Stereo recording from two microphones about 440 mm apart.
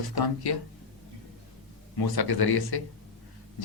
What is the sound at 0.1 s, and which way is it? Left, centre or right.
Speech, left.